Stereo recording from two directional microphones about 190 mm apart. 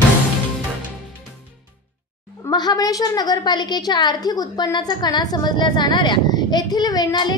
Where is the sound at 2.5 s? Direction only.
20° left (ahead or behind).